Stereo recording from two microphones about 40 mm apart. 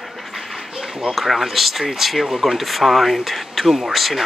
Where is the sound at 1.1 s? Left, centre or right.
Centre.